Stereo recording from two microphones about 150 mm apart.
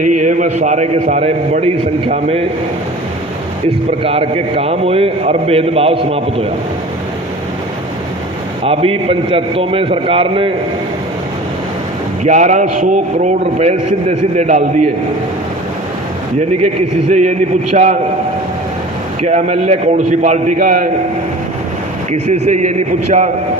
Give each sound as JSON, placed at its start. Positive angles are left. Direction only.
{"t": 0.0, "sound": "a man's voice", "side_deg": -55}
{"t": 4.0, "sound": "a man's voice", "side_deg": -40}
{"t": 8.6, "sound": "a man's voice", "side_deg": -40}
{"t": 12.2, "sound": "a man's voice", "side_deg": -55}
{"t": 17.1, "sound": "a man's voice", "side_deg": -50}
{"t": 19.2, "sound": "a man's voice", "side_deg": -50}
{"t": 22.1, "sound": "a man's voice", "side_deg": -50}